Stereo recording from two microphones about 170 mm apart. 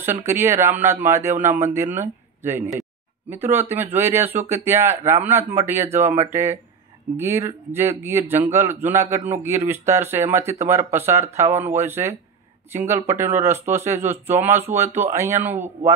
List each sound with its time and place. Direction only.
0.0 s speech: 15° right (ahead or behind)